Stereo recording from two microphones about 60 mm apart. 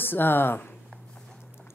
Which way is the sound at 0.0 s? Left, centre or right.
Left.